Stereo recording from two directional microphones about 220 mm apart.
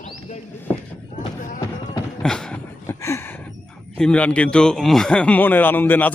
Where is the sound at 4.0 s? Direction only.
5° left (ahead or behind).